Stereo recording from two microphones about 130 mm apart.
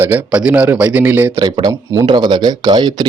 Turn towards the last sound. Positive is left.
turn(degrees=-30)  # may be behind; listen again after turning